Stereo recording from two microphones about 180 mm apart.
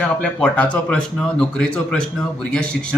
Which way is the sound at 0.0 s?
5° left (ahead or behind).